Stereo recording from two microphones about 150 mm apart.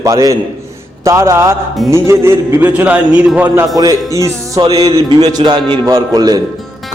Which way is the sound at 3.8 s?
25° right (ahead or behind).